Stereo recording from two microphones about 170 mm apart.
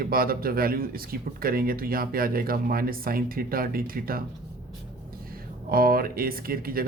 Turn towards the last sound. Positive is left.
turn(degrees=-60)  # may be behind; listen again after turning